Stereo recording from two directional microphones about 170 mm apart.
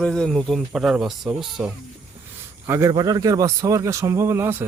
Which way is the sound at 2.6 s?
15° right (ahead or behind).